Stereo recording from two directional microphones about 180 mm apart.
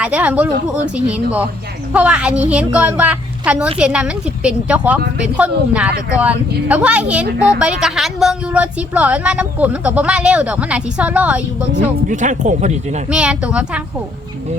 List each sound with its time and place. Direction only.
0.0 s a woman's voice: 5° right (ahead or behind)
12.0 s speech: 45° right (ahead or behind)
13.1 s a woman's voice: 5° right (ahead or behind)